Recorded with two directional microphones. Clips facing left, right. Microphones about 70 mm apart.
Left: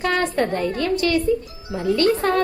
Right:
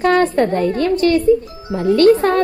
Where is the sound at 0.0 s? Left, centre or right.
Right.